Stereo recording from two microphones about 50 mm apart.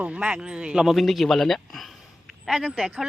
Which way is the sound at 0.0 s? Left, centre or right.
Right.